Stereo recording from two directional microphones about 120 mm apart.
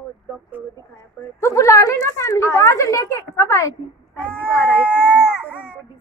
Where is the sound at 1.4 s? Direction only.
25° left (ahead or behind).